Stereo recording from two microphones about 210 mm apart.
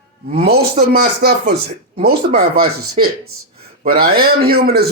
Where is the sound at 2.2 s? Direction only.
35° right (ahead or behind).